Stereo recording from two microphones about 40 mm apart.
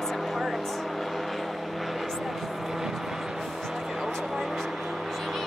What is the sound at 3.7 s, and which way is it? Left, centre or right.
Music, centre.